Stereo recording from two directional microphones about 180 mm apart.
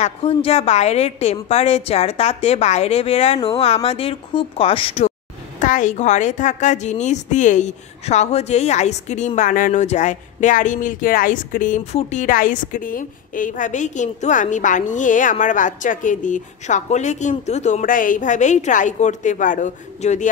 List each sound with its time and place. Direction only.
0.0 s a woman's voice: 35° left (ahead or behind)
5.6 s a woman's voice: 45° left (ahead or behind)